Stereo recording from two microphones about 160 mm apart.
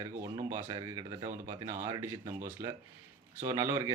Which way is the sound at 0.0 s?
25° right (ahead or behind).